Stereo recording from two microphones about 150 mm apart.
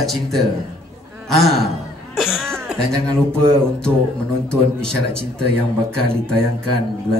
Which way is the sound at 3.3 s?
5° left (ahead or behind).